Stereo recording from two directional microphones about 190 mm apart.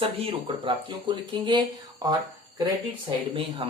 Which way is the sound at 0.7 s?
25° right (ahead or behind).